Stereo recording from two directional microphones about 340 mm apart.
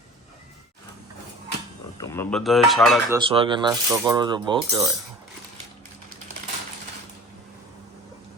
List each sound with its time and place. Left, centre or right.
2.0 s speech: centre
3.2 s speech: centre